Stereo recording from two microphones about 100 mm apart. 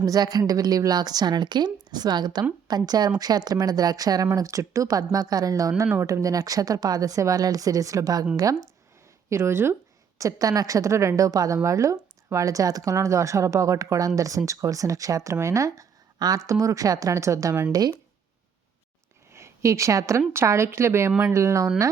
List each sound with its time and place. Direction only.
0.0 s a woman's voice: 40° right (ahead or behind)
9.3 s a woman's voice: 25° right (ahead or behind)
17.7 s a woman's voice: 40° right (ahead or behind)
19.3 s a woman's voice: 25° right (ahead or behind)